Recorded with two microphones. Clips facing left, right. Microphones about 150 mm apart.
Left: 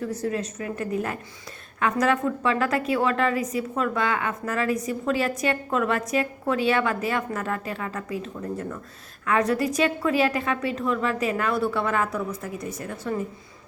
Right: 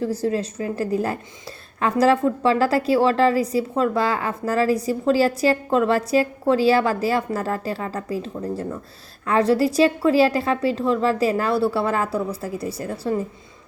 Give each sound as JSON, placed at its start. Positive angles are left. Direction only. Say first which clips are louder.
{"t": 0.0, "sound": "a woman's voice", "louder": "right 5 dB", "side_deg": -30}